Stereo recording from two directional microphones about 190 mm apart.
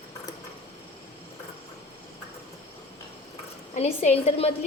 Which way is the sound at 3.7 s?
35° left (ahead or behind).